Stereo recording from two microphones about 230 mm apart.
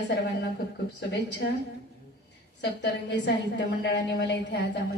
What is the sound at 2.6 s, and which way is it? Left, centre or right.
A woman's voice, left.